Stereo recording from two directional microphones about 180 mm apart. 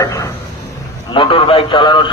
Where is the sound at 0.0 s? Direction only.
20° left (ahead or behind).